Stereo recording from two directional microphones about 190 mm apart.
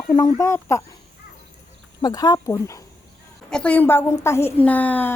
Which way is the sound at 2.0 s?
20° left (ahead or behind).